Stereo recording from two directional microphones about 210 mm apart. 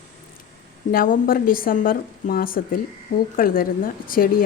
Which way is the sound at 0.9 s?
40° left (ahead or behind).